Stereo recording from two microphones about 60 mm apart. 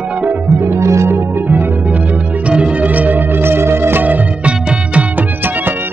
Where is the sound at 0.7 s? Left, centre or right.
Right.